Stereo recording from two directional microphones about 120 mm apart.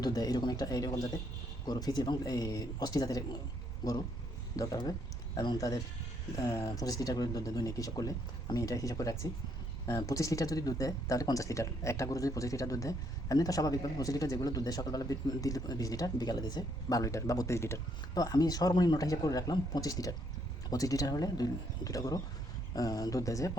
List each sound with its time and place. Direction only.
0.0 s speech: 30° left (ahead or behind)
4.5 s speech: 30° left (ahead or behind)